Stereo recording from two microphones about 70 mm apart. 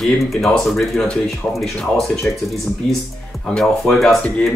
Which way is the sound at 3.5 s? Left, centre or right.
Centre.